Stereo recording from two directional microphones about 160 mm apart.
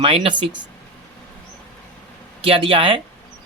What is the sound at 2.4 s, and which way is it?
Speech, 35° right (ahead or behind).